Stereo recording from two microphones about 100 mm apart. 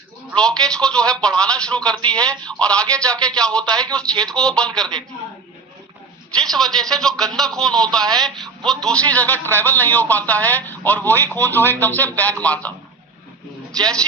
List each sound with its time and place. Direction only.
0.3 s a man's voice: 10° left (ahead or behind)
6.3 s a man's voice: 5° left (ahead or behind)